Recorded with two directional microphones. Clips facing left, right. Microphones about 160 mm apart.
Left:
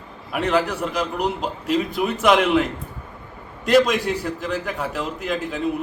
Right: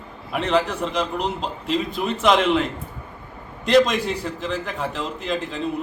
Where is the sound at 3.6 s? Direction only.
5° left (ahead or behind).